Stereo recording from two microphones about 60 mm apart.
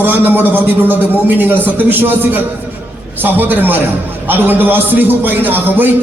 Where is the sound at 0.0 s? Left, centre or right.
Right.